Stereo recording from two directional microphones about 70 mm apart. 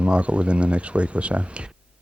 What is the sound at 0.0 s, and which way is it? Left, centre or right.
Speech, centre.